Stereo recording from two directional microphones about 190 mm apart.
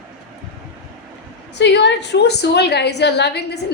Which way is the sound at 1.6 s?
65° left (ahead or behind).